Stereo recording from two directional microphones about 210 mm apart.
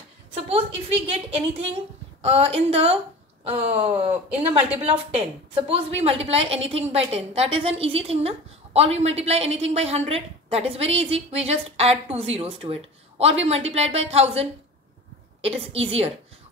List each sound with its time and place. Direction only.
0.3 s a woman's voice: 25° right (ahead or behind)